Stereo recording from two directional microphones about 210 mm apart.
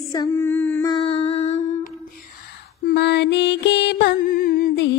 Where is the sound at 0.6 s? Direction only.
10° left (ahead or behind).